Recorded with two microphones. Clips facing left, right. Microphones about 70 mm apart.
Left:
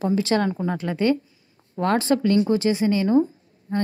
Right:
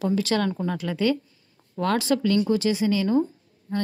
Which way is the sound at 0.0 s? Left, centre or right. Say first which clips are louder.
Left 2 dB; left.